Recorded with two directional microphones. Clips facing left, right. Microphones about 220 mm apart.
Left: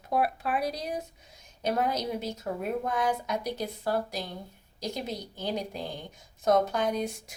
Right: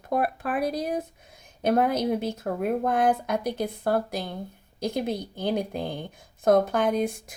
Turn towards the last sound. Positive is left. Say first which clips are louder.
# right 5 dB
turn(degrees=-55)  # may be behind; listen again after turning